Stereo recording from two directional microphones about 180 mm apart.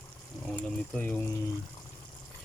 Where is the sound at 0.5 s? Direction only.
10° left (ahead or behind).